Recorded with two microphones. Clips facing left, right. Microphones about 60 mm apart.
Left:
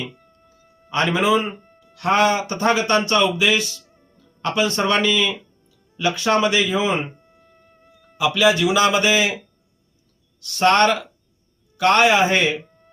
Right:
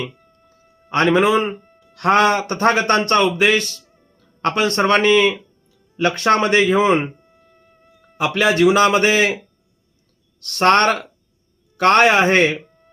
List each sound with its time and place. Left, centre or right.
0.9 s a man's voice: right
3.8 s music: centre
4.2 s speech: right
7.2 s music: centre
8.2 s a man's voice: right
10.4 s a man's voice: right
12.6 s music: centre